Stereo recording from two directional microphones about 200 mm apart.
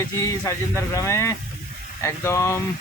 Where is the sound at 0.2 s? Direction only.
15° left (ahead or behind).